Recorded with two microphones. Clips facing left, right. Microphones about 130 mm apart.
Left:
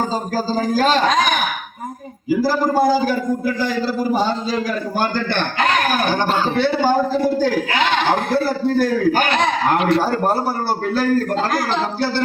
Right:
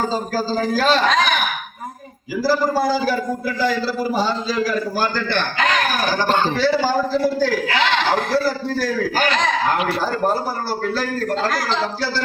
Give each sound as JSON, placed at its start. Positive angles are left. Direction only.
{"t": 0.1, "sound": "a man's voice", "side_deg": 45}
{"t": 2.4, "sound": "a man's voice", "side_deg": 50}
{"t": 6.2, "sound": "a man's voice", "side_deg": 5}
{"t": 6.6, "sound": "a man's voice", "side_deg": 55}
{"t": 10.7, "sound": "a man's voice", "side_deg": 50}